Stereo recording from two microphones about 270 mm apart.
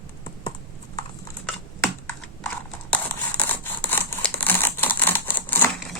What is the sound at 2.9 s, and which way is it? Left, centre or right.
Scissors, centre.